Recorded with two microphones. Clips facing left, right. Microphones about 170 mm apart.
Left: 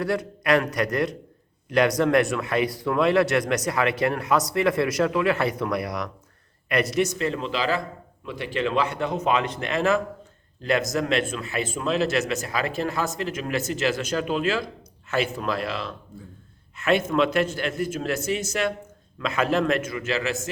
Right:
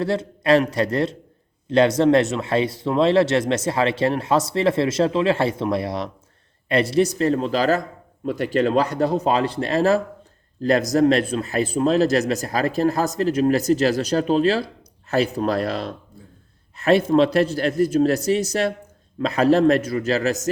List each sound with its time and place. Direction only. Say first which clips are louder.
0.0 s speech: right 3 dB; 25° right (ahead or behind)